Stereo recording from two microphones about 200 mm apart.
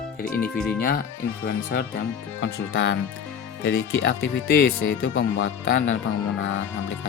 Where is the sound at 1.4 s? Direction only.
50° left (ahead or behind).